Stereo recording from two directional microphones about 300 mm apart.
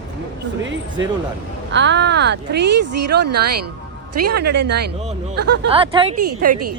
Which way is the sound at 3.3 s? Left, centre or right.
Right.